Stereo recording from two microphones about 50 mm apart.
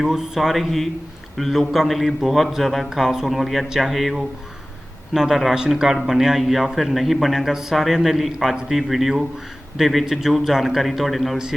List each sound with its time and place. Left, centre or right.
0.0 s a man's voice: centre
5.1 s a man's voice: centre